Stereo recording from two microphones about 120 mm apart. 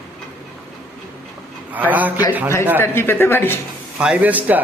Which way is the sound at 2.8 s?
20° left (ahead or behind).